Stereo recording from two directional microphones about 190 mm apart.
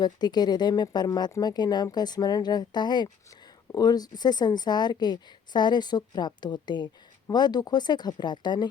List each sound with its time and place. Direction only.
0.0 s a woman's voice: 20° left (ahead or behind)